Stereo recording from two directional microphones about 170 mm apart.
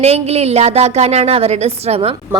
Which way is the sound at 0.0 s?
40° right (ahead or behind).